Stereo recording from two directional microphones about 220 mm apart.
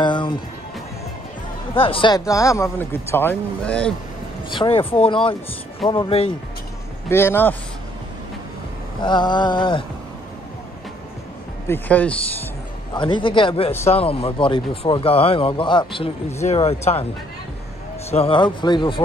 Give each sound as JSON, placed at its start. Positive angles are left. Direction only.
{"t": 0.0, "sound": "music", "side_deg": 20}
{"t": 1.8, "sound": "speech", "side_deg": 25}
{"t": 4.5, "sound": "a man's voice", "side_deg": 25}
{"t": 7.1, "sound": "speech", "side_deg": 10}
{"t": 9.0, "sound": "a man's voice", "side_deg": 20}
{"t": 11.6, "sound": "speech", "side_deg": 10}
{"t": 12.9, "sound": "a man's voice", "side_deg": 20}
{"t": 18.1, "sound": "a man's voice", "side_deg": 25}